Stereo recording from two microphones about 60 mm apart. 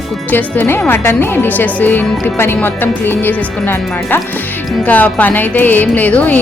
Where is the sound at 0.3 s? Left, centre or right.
Left.